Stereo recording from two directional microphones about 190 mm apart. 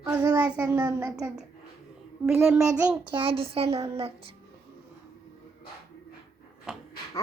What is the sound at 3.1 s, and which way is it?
Speech, 30° right (ahead or behind).